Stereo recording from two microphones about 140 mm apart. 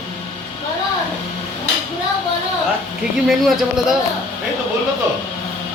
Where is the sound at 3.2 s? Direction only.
5° right (ahead or behind).